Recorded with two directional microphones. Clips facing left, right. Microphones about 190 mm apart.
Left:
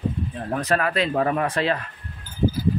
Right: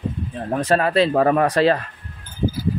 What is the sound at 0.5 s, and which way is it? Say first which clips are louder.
Speech: right 5 dB; 30° right (ahead or behind).